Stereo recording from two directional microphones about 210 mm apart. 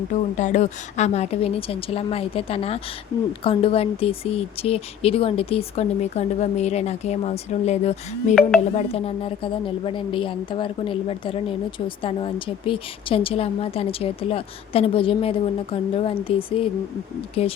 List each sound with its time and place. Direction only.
0.1 s speech: 35° left (ahead or behind)
8.4 s speech: centre (ahead or behind)
8.7 s speech: 30° left (ahead or behind)